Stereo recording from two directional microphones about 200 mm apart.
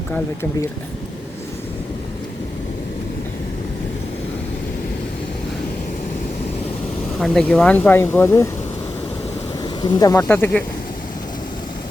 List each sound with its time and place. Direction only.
7.2 s speech: 5° left (ahead or behind)
9.8 s speech: 20° left (ahead or behind)